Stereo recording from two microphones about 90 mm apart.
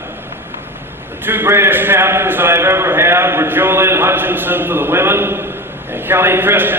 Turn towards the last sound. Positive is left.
turn(degrees=-20)  # may be behind; listen again after turning